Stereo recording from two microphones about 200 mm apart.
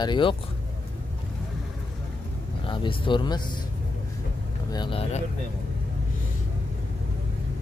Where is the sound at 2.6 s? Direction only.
25° left (ahead or behind).